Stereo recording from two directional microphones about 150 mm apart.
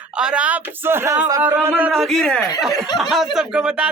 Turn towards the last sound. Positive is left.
turn(degrees=-5)  # may be behind; listen again after turning